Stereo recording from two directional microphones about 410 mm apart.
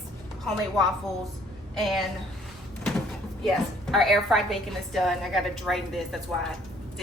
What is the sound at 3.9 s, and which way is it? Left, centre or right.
A woman's voice, centre.